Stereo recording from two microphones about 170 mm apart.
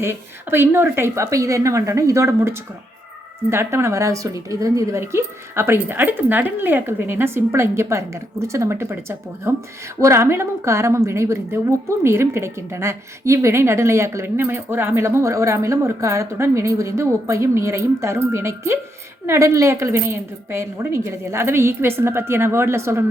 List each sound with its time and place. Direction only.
0.0 s a woman's voice: 15° right (ahead or behind)